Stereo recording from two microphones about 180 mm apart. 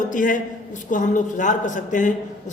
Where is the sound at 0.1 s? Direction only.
45° left (ahead or behind).